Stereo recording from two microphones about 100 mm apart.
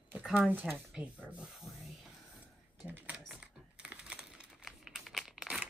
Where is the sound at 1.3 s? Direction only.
5° right (ahead or behind).